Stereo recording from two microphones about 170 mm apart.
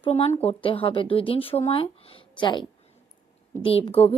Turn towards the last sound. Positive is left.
turn(degrees=35)  # may be behind; listen again after turning